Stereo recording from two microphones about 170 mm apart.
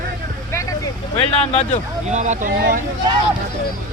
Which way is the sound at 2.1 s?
45° right (ahead or behind).